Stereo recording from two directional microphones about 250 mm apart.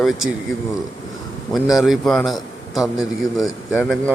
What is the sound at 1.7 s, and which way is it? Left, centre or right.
A man's voice, centre.